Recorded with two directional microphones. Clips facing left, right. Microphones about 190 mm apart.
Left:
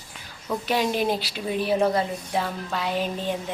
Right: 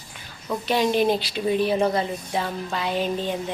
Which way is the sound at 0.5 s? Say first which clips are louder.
Right 2 dB; 5° left (ahead or behind).